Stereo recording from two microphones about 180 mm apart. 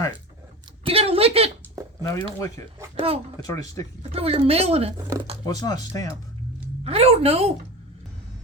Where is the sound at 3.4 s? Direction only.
20° left (ahead or behind).